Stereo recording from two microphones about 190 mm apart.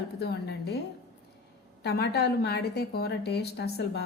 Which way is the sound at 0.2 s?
60° left (ahead or behind).